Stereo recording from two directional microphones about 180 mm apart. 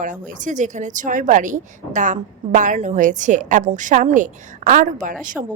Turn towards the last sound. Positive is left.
turn(degrees=-45)  # may be behind; listen again after turning